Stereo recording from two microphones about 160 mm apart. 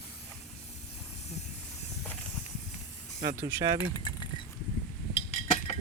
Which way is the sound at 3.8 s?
25° left (ahead or behind).